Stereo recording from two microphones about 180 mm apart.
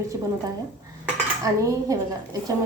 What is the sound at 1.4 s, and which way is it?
Cutlery, 20° right (ahead or behind).